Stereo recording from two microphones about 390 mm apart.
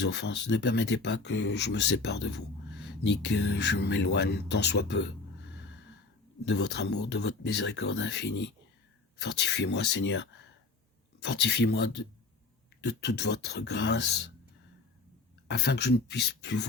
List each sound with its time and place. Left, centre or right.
0.0 s speech: left
2.2 s a sound: left
3.3 s speech: left
6.4 s speech: left
11.4 s speech: left
15.4 s speech: left